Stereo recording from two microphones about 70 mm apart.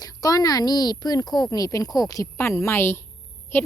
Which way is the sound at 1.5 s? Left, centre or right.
Left.